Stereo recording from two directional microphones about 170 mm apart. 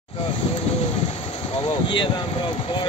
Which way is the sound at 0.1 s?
35° left (ahead or behind).